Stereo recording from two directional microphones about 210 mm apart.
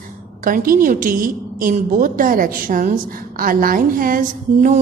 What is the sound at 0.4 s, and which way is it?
A woman's voice, 40° right (ahead or behind).